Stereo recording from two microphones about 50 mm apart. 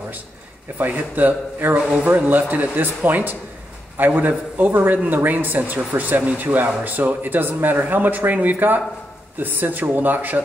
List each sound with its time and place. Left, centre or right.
0.7 s speech: right